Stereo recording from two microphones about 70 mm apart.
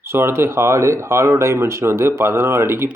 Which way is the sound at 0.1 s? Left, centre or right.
Right.